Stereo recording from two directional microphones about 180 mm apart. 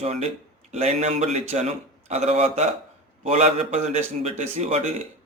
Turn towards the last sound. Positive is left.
turn(degrees=-35)  # may be behind; listen again after turning